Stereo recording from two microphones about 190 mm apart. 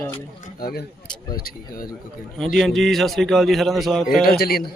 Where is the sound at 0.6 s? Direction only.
55° left (ahead or behind).